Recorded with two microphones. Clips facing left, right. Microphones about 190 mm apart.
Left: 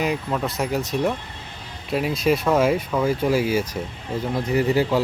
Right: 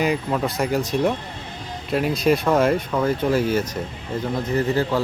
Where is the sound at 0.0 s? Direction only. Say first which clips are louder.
Right 2 dB; centre (ahead or behind).